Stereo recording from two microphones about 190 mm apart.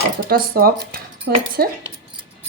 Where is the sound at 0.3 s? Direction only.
50° right (ahead or behind).